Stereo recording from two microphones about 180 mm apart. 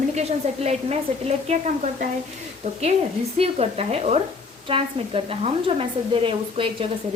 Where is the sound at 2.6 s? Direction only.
40° right (ahead or behind).